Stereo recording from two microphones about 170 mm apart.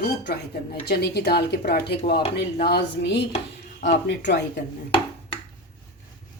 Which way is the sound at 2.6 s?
80° left.